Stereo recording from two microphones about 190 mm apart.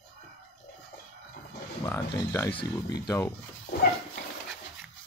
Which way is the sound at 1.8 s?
15° left (ahead or behind).